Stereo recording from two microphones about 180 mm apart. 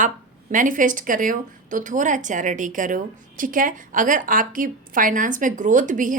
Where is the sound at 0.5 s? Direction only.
45° right (ahead or behind).